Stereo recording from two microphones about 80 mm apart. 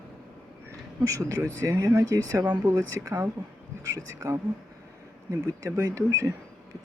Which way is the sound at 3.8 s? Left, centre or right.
Right.